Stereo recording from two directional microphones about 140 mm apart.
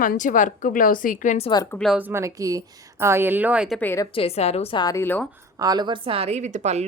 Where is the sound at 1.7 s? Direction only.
Centre (ahead or behind).